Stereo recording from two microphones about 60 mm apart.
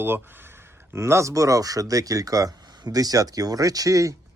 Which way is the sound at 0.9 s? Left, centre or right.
Right.